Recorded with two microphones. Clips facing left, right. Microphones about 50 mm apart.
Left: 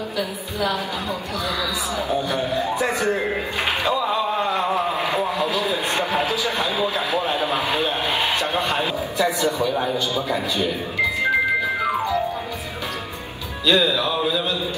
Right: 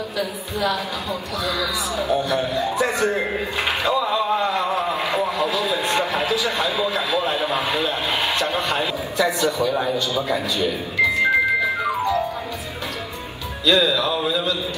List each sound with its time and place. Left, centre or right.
2.0 s a man's voice: right
3.6 s a sound: right
5.0 s radio: right
7.8 s a man's voice: right
13.7 s speech: right